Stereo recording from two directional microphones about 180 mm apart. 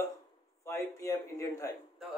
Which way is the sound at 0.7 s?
15° left (ahead or behind).